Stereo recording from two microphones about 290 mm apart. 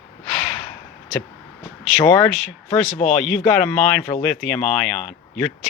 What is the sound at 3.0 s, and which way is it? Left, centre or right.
Speech, centre.